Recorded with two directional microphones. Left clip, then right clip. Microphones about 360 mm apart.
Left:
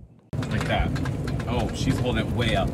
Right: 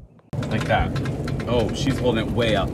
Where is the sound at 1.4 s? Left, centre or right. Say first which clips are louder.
Right 6 dB; centre.